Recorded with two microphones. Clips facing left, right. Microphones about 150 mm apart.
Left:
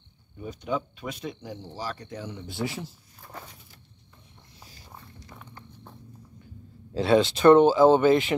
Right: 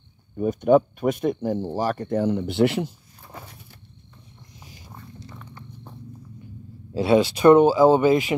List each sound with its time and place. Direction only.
0.4 s speech: 50° right (ahead or behind); by 2.9 s 70° right (ahead or behind)
4.6 s a sound: 15° right (ahead or behind)
6.9 s speech: 10° right (ahead or behind)